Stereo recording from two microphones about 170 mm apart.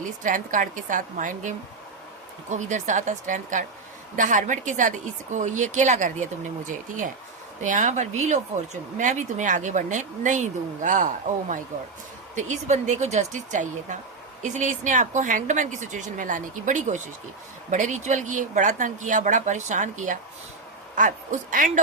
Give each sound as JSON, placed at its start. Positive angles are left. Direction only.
{"t": 0.0, "sound": "speech", "side_deg": -50}